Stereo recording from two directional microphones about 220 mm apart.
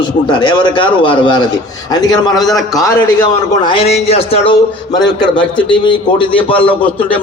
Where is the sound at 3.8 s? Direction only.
25° left (ahead or behind).